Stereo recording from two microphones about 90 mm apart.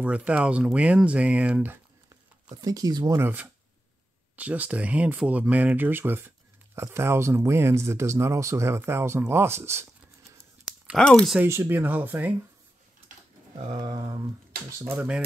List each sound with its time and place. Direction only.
0.0 s speech: 15° right (ahead or behind)
2.5 s speech: 45° right (ahead or behind)
3.1 s speech: 25° right (ahead or behind)
11.0 s speech: 10° left (ahead or behind)
11.4 s speech: 30° right (ahead or behind)
13.7 s speech: 45° right (ahead or behind)
14.7 s speech: 30° right (ahead or behind)